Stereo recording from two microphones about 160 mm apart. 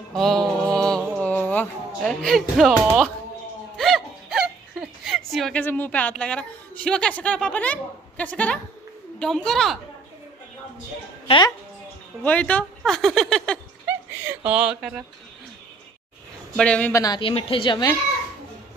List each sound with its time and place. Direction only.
0.1 s music: centre (ahead or behind)
5.6 s a woman's voice: 10° left (ahead or behind)
11.2 s speech: 30° left (ahead or behind)
12.2 s a woman's voice: 10° left (ahead or behind)
13.8 s speech: 10° right (ahead or behind)
16.5 s a woman's voice: 5° left (ahead or behind)
16.9 s speech: 25° left (ahead or behind)